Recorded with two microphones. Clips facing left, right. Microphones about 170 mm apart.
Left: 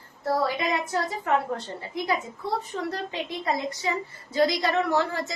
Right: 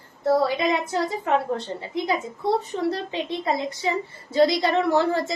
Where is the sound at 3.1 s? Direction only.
25° right (ahead or behind).